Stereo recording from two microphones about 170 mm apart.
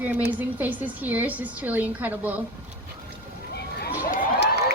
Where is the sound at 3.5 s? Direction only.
70° left (ahead or behind).